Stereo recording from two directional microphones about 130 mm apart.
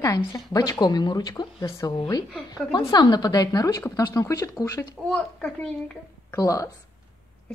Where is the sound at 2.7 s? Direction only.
30° left (ahead or behind).